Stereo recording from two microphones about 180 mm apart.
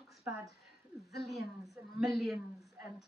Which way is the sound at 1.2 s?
Centre (ahead or behind).